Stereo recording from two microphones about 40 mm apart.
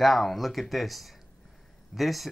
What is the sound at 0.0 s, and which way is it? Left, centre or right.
Speech, centre.